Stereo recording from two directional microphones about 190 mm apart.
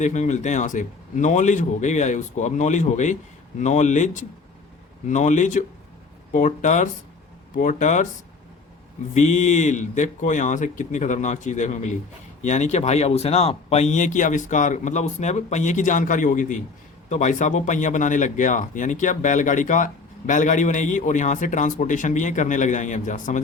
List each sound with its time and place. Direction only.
0.0 s speech: 40° left (ahead or behind)
9.1 s speech: 40° left (ahead or behind)